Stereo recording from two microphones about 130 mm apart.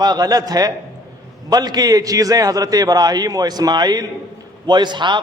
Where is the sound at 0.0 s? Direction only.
30° right (ahead or behind).